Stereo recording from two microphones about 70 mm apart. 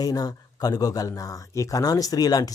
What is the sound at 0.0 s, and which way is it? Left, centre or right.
Speech, left.